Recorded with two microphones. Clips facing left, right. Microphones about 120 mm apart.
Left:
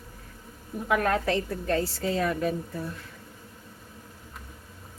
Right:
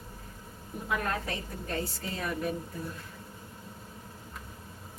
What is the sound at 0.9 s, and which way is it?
A woman's voice, 80° left.